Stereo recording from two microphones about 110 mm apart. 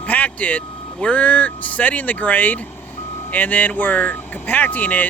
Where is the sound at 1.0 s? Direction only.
15° left (ahead or behind).